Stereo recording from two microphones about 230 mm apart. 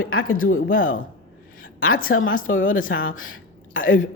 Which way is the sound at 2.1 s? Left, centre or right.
Left.